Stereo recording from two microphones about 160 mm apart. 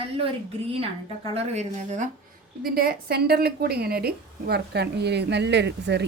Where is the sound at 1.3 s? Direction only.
40° right (ahead or behind).